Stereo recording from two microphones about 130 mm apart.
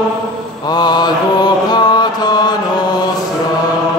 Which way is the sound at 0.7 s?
35° left (ahead or behind).